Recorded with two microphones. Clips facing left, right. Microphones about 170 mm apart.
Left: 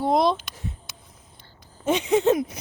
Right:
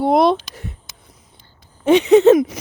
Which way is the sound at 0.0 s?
65° right (ahead or behind).